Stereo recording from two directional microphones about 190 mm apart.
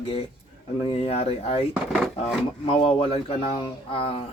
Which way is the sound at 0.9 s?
35° left (ahead or behind).